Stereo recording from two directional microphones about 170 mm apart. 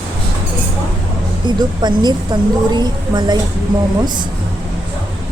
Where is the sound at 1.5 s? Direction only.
25° right (ahead or behind).